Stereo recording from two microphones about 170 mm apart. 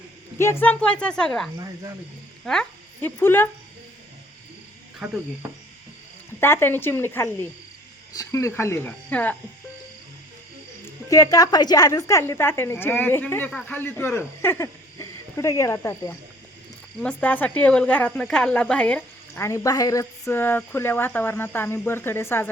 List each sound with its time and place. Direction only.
0.3 s speech: 15° left (ahead or behind)
4.9 s speech: 5° right (ahead or behind)
6.4 s speech: 15° left (ahead or behind)
11.1 s speech: 20° left (ahead or behind)